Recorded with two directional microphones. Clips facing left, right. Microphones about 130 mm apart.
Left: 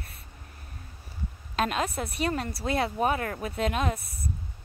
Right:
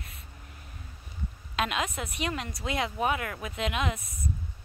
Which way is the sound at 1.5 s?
40° left (ahead or behind).